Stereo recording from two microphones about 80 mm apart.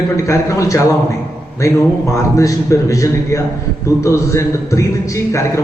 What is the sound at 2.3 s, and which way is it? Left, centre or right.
A man's voice, left.